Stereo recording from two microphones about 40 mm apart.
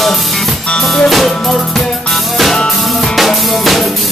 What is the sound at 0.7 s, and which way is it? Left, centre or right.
Music, left.